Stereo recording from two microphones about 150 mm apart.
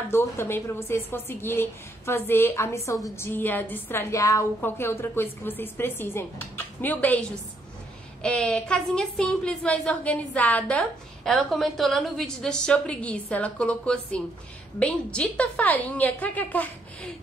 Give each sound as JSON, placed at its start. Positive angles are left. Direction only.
{"t": 0.1, "sound": "a woman's voice", "side_deg": 15}